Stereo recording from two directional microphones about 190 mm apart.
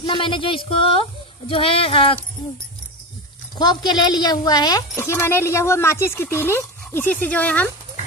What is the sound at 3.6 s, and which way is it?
Speech, 20° left (ahead or behind).